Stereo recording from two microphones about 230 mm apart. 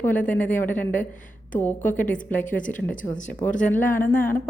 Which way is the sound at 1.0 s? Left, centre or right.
Left.